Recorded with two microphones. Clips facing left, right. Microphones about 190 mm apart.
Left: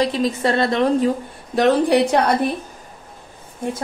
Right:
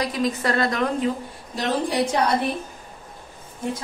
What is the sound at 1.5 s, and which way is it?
Speech, 65° left (ahead or behind).